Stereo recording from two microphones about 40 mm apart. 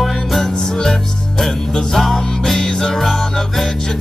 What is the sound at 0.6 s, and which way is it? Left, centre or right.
Music, centre.